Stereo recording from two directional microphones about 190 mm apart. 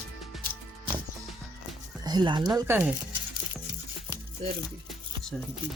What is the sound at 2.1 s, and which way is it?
Speech, 25° right (ahead or behind).